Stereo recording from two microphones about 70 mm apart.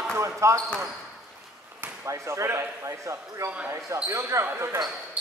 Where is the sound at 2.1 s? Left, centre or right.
Right.